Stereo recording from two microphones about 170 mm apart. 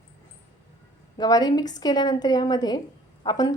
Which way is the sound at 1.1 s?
25° left (ahead or behind).